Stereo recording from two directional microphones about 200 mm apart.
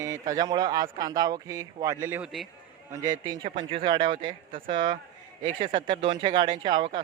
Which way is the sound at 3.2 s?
25° right (ahead or behind).